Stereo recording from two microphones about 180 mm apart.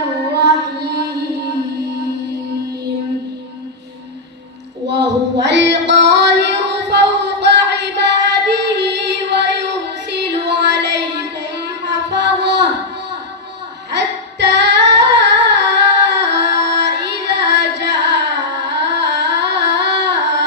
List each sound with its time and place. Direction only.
0.3 s mantra: 65° right (ahead or behind)
4.9 s a sound: 75° right (ahead or behind)
7.8 s music: 75° right (ahead or behind)
13.9 s female singing: 70° right (ahead or behind)
18.5 s singing: 75° right (ahead or behind)